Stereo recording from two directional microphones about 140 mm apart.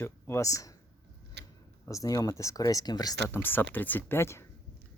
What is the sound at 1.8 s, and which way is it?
Speech, 25° left (ahead or behind).